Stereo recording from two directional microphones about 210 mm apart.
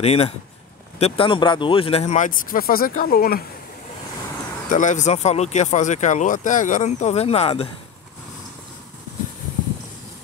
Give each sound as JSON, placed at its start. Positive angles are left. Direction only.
{"t": 0.0, "sound": "speech", "side_deg": 30}
{"t": 4.6, "sound": "speech", "side_deg": 35}